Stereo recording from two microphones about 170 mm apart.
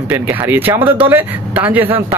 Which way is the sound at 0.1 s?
10° right (ahead or behind).